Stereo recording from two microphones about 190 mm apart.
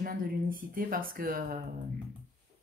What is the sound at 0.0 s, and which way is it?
Speech, 50° right (ahead or behind).